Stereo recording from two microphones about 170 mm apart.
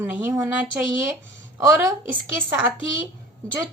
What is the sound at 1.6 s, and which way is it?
Speech, 20° right (ahead or behind).